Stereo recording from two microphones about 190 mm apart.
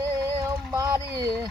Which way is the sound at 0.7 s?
20° right (ahead or behind).